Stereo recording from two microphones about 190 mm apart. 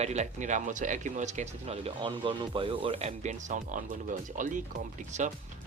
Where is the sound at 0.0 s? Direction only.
35° right (ahead or behind).